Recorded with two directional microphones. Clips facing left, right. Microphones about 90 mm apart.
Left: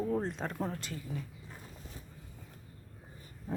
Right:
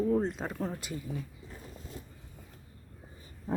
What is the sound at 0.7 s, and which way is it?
Speech, 15° right (ahead or behind).